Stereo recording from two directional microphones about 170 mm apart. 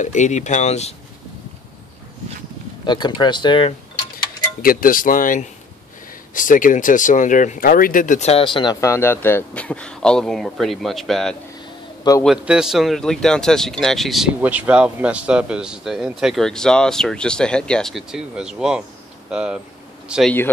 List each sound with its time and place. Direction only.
0.0 s speech: 45° left (ahead or behind)
2.8 s speech: 25° left (ahead or behind)
4.6 s cutlery: 55° left (ahead or behind)
6.3 s a man's voice: 50° left (ahead or behind); by 20.3 s centre (ahead or behind)